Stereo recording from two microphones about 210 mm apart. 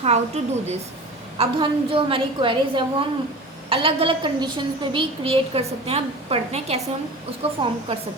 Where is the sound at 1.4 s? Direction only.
25° right (ahead or behind).